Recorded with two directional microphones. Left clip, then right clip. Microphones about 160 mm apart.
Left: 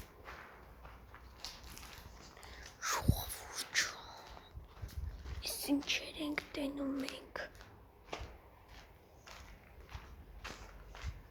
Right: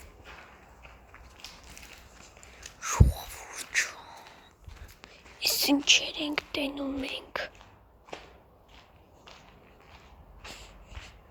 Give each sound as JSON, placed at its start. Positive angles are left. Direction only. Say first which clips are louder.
{"t": 2.8, "sound": "whispering", "louder": "right 5 dB", "side_deg": 0}
{"t": 5.4, "sound": "a sound", "louder": "right 12 dB", "side_deg": -35}
{"t": 5.9, "sound": "speech", "louder": "right 14 dB", "side_deg": -20}